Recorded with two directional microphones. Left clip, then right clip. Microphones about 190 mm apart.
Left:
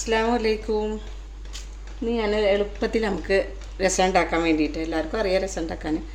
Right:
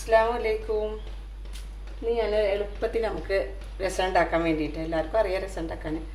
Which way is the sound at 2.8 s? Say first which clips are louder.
Left 3 dB; 55° left (ahead or behind).